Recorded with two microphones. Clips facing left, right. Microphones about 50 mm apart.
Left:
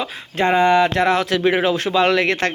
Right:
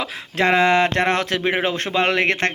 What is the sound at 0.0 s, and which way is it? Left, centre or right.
Speech, right.